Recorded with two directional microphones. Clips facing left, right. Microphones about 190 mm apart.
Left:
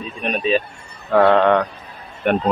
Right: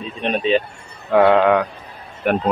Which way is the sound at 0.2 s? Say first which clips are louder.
Right 2 dB; 25° right (ahead or behind).